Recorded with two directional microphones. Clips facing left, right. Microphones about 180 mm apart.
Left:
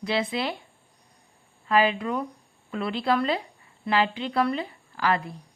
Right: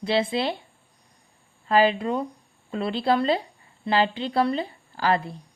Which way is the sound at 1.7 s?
30° right (ahead or behind).